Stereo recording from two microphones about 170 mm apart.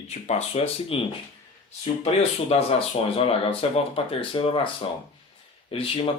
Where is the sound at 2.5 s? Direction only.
35° left (ahead or behind).